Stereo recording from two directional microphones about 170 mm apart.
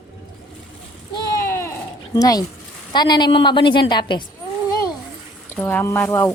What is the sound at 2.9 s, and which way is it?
A woman's voice, 25° left (ahead or behind).